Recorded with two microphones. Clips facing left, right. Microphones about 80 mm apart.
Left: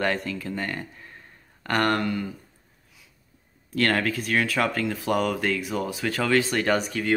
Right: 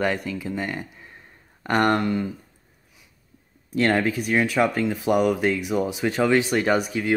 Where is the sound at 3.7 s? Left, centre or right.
Centre.